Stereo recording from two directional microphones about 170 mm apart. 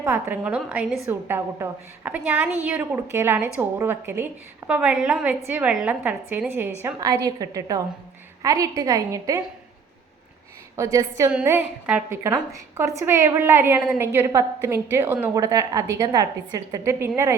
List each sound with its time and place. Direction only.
0.0 s a woman's voice: 15° right (ahead or behind)
10.8 s a woman's voice: 15° right (ahead or behind)